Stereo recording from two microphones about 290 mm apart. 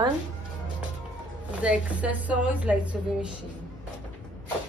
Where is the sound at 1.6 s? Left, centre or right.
Centre.